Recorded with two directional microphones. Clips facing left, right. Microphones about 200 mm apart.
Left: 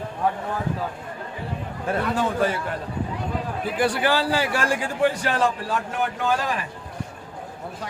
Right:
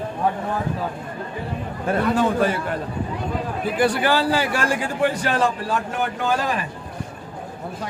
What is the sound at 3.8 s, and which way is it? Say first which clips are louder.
Speech: right 2 dB; 50° right (ahead or behind).